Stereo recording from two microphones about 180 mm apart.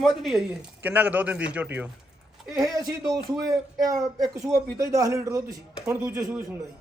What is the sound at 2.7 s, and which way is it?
Speech, 20° right (ahead or behind).